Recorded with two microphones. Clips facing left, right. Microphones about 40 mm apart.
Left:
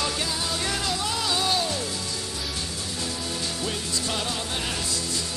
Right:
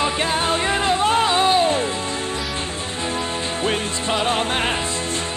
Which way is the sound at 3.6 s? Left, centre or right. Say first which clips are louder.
Right 7 dB; right.